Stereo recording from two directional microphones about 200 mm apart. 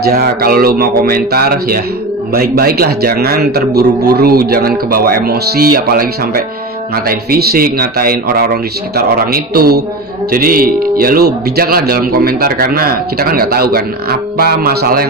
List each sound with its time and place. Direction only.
0.0 s a man's voice: 50° right (ahead or behind)
7.1 s a man's voice: 50° right (ahead or behind)